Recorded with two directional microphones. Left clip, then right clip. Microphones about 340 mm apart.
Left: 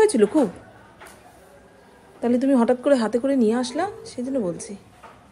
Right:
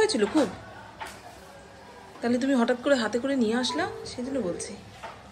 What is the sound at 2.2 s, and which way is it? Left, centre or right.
A woman's voice, centre.